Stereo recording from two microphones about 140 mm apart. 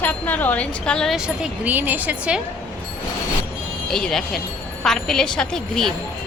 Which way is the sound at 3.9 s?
5° left (ahead or behind).